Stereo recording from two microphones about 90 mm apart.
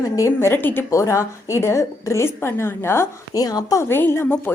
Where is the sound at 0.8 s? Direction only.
35° left (ahead or behind).